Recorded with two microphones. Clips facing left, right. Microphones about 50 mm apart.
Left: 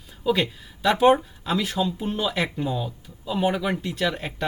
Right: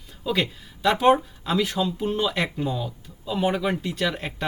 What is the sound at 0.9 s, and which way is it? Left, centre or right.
Speech, centre.